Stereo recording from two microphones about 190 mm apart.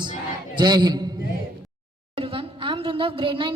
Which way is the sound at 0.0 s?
25° right (ahead or behind).